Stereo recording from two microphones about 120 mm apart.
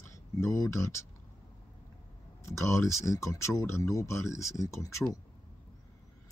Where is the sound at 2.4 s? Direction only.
25° left (ahead or behind).